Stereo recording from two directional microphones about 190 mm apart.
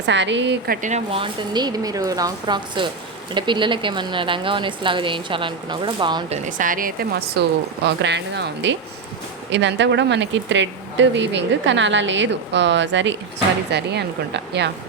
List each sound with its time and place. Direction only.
0.0 s speech: 70° right (ahead or behind)
0.8 s speech: 40° right (ahead or behind)
6.3 s a woman's voice: 40° right (ahead or behind)
7.9 s a woman's voice: 65° right (ahead or behind)